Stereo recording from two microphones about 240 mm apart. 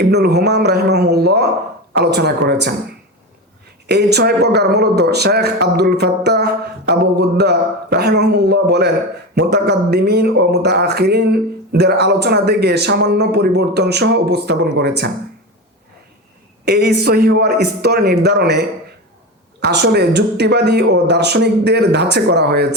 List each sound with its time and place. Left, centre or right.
0.1 s speech: right
3.8 s speech: right
16.6 s a man's voice: right